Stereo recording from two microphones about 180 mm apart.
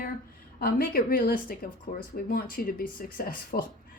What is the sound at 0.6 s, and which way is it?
Speech, 55° left (ahead or behind).